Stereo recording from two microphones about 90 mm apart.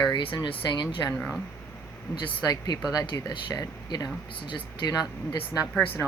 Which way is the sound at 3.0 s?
60° left (ahead or behind).